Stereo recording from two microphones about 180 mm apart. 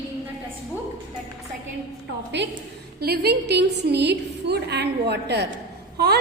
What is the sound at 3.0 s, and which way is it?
A woman's voice, 60° right (ahead or behind).